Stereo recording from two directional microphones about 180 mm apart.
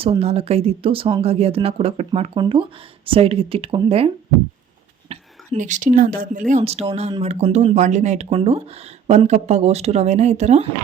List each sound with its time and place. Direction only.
0.0 s speech: 35° right (ahead or behind); by 6.4 s 50° right (ahead or behind)
6.5 s speech: 35° right (ahead or behind)